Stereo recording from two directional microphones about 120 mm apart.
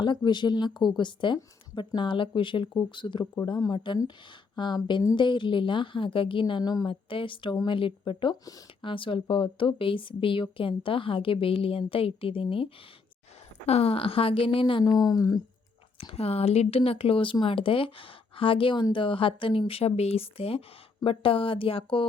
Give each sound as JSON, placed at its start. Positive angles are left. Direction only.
{"t": 0.3, "sound": "speech", "side_deg": 40}
{"t": 13.7, "sound": "speech", "side_deg": 55}
{"t": 14.8, "sound": "speech", "side_deg": 35}
{"t": 16.0, "sound": "speech", "side_deg": 55}